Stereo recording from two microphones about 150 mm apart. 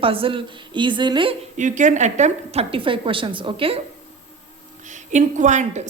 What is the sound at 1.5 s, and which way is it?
A woman's voice, 55° right (ahead or behind).